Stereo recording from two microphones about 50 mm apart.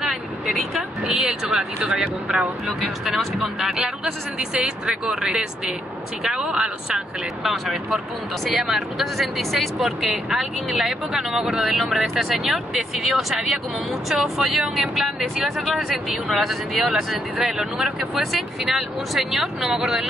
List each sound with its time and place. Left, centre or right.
1.0 s speech: centre
3.8 s speech: centre
7.4 s speech: centre